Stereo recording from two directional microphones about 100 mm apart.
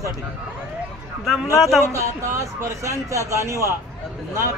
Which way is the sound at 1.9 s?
30° right (ahead or behind).